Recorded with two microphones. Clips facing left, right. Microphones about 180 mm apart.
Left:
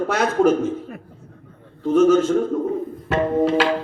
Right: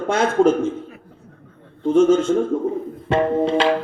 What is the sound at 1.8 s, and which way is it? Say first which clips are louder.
A man's voice: even; 25° right (ahead or behind).